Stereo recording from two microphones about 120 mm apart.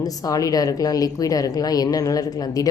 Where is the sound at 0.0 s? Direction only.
30° left (ahead or behind).